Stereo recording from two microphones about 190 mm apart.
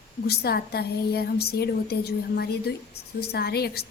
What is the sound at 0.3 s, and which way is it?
Speech, 55° left (ahead or behind).